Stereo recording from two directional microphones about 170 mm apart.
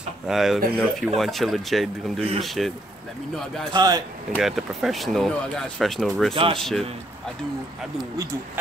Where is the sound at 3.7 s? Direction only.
20° right (ahead or behind).